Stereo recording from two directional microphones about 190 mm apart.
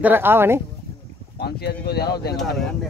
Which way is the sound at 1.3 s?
60° left (ahead or behind).